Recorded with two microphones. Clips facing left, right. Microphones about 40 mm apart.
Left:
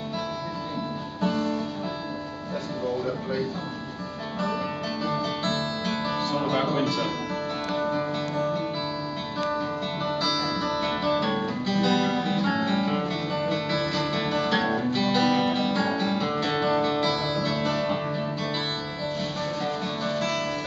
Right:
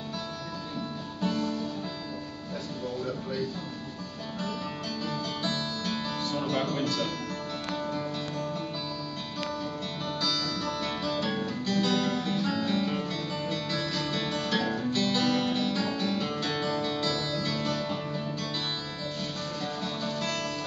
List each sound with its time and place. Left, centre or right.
1.2 s music: left
5.9 s music: centre
7.8 s music: left
9.5 s music: left
10.2 s guitar: centre
14.9 s music: centre
19.6 s music: centre